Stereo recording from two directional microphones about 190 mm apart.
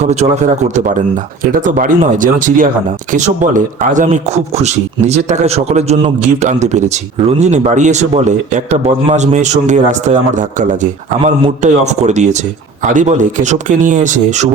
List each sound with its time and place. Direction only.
0.0 s speech: 35° right (ahead or behind)